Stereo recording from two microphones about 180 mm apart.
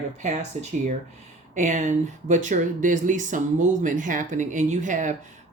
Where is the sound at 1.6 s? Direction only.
45° right (ahead or behind).